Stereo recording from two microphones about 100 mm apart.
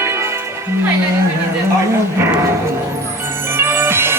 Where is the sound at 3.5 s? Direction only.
25° right (ahead or behind).